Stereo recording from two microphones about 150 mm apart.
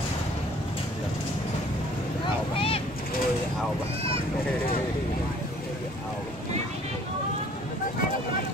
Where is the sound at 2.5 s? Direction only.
40° left (ahead or behind).